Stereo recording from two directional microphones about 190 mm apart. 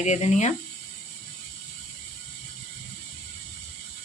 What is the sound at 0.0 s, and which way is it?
Speech, 40° left (ahead or behind).